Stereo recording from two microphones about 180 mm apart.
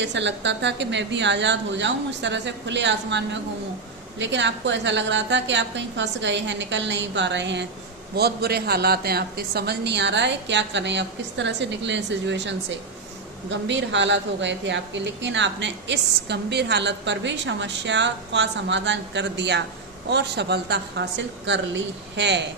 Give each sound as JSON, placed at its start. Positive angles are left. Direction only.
{"t": 0.0, "sound": "a woman's voice", "side_deg": -80}
{"t": 8.1, "sound": "a woman's voice", "side_deg": -60}